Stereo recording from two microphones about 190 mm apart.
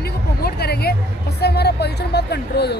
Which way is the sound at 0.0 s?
55° left (ahead or behind).